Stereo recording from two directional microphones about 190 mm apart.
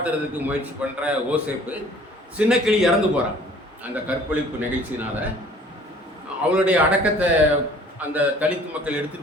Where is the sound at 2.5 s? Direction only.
Centre (ahead or behind).